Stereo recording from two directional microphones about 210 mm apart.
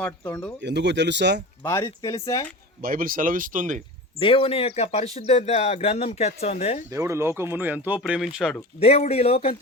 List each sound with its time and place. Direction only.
0.0 s speech: 10° left (ahead or behind)
0.6 s speech: 55° right (ahead or behind)
1.6 s speech: 15° left (ahead or behind)
2.8 s speech: 40° right (ahead or behind)
4.2 s speech: 25° left (ahead or behind)
6.9 s speech: 15° right (ahead or behind)
8.8 s speech: 30° left (ahead or behind)